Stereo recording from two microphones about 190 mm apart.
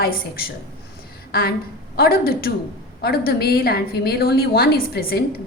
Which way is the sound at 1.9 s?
55° left (ahead or behind).